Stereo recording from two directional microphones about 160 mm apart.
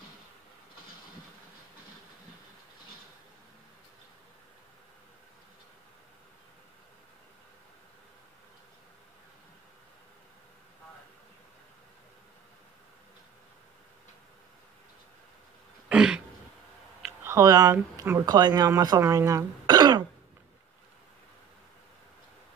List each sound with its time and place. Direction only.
15.9 s throat clearing: 5° right (ahead or behind)
17.2 s speech: 20° right (ahead or behind)